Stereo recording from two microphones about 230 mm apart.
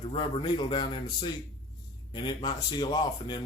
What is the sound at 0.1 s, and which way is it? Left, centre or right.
Speech, left.